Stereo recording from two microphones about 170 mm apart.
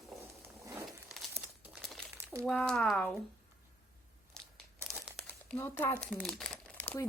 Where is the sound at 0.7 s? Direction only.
Centre (ahead or behind).